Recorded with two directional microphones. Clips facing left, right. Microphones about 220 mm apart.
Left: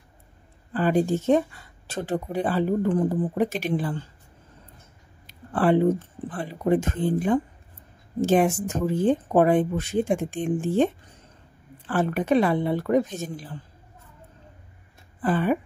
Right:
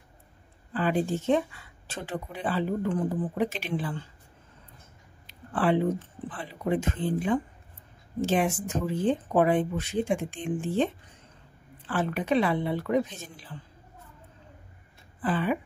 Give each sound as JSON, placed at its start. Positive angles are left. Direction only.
{"t": 0.7, "sound": "speech", "side_deg": 40}
{"t": 5.2, "sound": "speech", "side_deg": 45}
{"t": 11.9, "sound": "speech", "side_deg": 45}
{"t": 15.2, "sound": "speech", "side_deg": 45}